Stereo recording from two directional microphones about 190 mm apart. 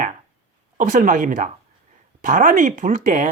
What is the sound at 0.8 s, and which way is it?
Speech, 45° right (ahead or behind).